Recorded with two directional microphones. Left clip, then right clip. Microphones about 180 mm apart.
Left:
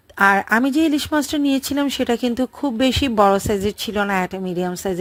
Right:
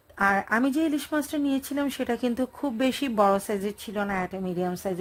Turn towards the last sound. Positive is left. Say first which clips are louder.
# left 6 dB
turn(degrees=25)  # may be behind; listen again after turning